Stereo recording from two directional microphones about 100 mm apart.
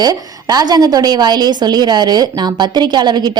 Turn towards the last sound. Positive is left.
turn(degrees=-45)  # may be behind; listen again after turning